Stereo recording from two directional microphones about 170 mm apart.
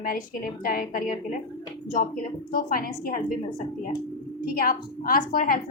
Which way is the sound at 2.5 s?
55° left (ahead or behind).